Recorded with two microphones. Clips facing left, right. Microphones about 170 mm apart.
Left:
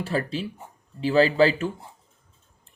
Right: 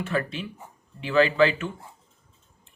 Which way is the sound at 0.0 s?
35° left (ahead or behind).